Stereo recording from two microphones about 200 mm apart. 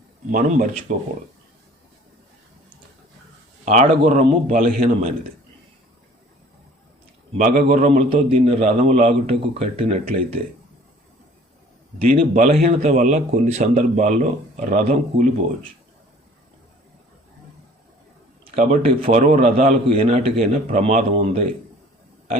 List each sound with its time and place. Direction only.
0.3 s a man's voice: 35° right (ahead or behind)
3.7 s a man's voice: 35° right (ahead or behind)
7.3 s a man's voice: 35° right (ahead or behind)
11.9 s a man's voice: 30° right (ahead or behind)
18.4 s a man's voice: 35° right (ahead or behind)